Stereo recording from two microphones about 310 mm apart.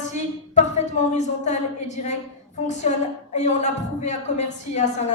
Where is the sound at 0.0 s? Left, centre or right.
Left.